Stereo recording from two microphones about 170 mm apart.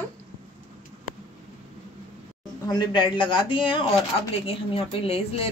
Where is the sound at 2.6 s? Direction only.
25° left (ahead or behind).